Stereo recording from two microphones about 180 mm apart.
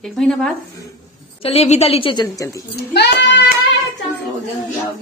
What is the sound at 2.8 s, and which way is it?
Speech, 65° left (ahead or behind).